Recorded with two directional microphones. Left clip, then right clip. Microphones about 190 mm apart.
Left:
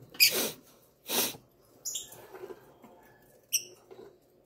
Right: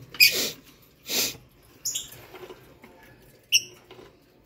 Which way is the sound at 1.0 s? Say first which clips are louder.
Right 4 dB; 15° left (ahead or behind).